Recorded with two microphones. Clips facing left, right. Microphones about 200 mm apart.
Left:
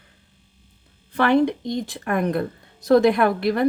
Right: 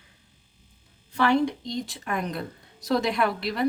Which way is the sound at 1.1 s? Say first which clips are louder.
Left 4 dB; 55° left (ahead or behind).